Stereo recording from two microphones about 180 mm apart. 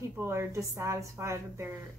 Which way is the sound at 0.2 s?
15° right (ahead or behind).